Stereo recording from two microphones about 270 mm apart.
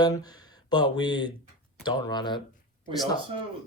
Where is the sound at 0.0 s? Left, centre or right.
Centre.